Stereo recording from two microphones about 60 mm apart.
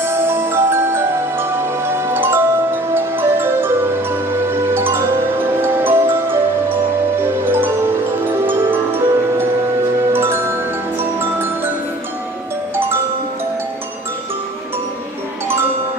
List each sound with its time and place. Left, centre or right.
0.0 s music: right
7.4 s music: right
11.1 s marimba: right